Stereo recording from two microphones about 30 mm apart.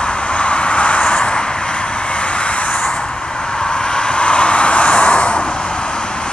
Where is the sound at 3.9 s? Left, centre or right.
Left.